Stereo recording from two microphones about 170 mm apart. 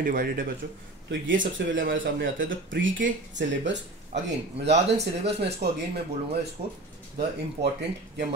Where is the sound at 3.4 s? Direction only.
90° right.